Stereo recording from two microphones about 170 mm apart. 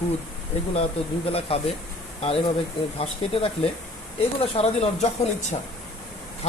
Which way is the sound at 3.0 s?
35° left (ahead or behind).